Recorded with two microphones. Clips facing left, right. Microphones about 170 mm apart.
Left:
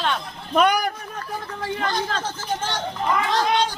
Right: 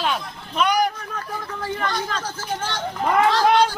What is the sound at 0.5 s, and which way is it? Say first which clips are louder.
Speech: left 1 dB; 50° left (ahead or behind).